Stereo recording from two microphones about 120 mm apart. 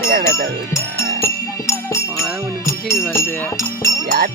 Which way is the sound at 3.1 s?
20° left (ahead or behind).